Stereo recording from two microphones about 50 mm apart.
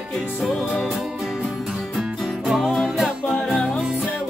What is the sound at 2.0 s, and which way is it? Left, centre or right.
Music, centre.